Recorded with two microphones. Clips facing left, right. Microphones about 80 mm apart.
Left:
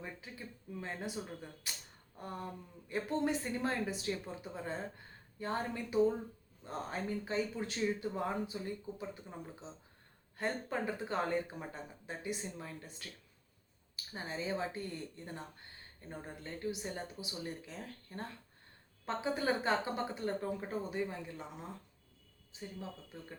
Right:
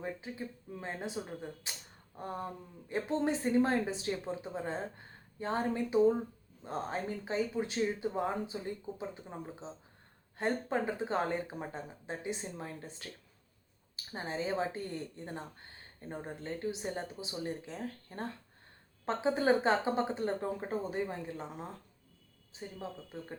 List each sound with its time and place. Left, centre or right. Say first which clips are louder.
0.0 s speech: right 7 dB; right